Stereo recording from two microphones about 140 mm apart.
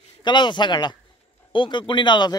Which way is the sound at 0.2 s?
35° left (ahead or behind).